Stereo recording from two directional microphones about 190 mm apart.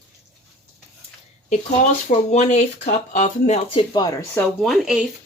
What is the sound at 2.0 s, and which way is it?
Speech, 40° left (ahead or behind).